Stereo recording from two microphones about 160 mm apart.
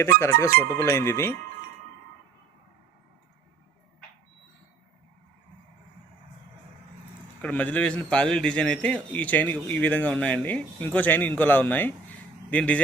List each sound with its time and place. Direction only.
0.2 s a man's voice: 15° left (ahead or behind)
7.4 s a man's voice: 10° left (ahead or behind)